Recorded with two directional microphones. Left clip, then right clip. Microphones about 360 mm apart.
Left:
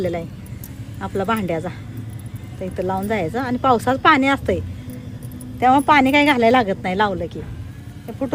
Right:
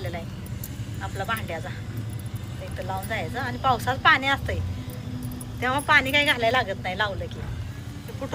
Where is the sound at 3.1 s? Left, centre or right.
Centre.